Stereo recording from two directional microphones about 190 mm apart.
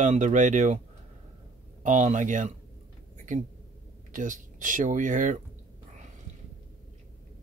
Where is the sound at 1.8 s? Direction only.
40° right (ahead or behind).